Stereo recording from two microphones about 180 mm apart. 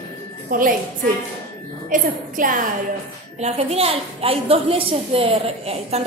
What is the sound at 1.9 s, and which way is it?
Speech, 50° right (ahead or behind).